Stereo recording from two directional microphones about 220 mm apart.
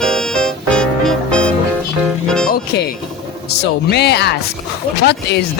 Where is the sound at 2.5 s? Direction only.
45° left (ahead or behind).